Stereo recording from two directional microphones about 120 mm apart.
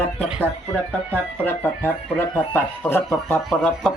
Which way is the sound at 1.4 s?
15° left (ahead or behind).